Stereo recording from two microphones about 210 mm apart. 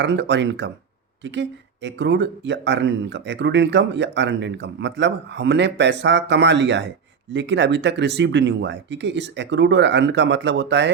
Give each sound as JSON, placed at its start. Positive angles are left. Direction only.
{"t": 0.0, "sound": "speech", "side_deg": -55}